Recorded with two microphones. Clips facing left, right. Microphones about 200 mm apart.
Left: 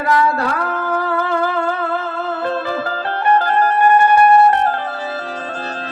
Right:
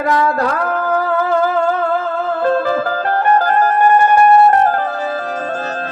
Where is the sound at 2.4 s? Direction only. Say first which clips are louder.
Right 7 dB; 45° right (ahead or behind).